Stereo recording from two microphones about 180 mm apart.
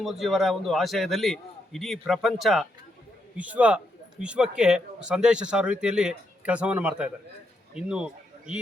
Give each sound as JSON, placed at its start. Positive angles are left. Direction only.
{"t": 0.0, "sound": "a man's voice", "side_deg": 0}